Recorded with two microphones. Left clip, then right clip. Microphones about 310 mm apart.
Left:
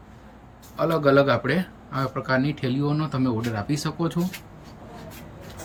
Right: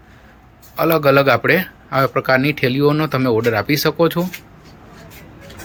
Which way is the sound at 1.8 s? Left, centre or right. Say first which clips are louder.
Right 13 dB; right.